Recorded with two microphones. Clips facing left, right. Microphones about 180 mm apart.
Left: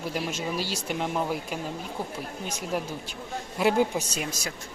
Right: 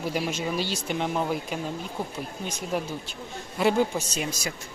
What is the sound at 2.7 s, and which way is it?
Speech, 5° left (ahead or behind).